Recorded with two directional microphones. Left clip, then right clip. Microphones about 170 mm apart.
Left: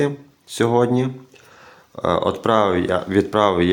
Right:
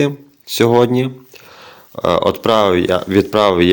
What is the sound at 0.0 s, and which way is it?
Speech, 20° right (ahead or behind).